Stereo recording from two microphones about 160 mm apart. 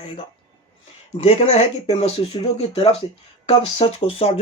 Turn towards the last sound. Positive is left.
turn(degrees=35)  # may be behind; listen again after turning